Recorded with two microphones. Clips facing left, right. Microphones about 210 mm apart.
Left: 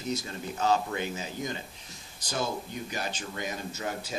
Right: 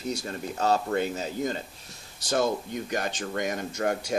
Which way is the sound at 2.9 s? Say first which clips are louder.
Right 7 dB; 55° right (ahead or behind).